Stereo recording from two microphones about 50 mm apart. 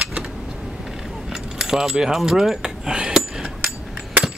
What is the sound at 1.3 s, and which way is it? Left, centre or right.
Speech, centre.